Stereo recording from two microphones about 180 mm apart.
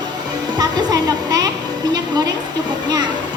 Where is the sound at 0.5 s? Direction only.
20° right (ahead or behind).